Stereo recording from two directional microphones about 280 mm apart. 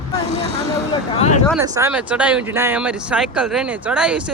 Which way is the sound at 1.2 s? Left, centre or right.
Left.